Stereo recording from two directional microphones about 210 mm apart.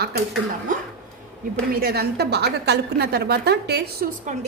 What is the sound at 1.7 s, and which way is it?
A woman's voice, 45° right (ahead or behind).